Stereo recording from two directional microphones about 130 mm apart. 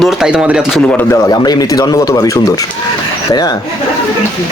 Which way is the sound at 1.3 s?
30° left (ahead or behind).